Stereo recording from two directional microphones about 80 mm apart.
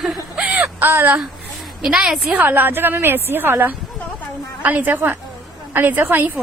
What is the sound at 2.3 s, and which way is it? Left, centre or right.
A woman's voice, right.